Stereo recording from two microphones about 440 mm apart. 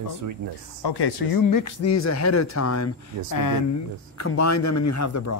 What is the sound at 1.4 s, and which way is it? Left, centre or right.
Speech, left.